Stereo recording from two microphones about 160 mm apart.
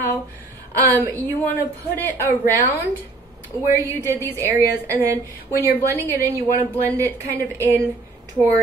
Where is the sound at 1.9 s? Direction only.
10° left (ahead or behind).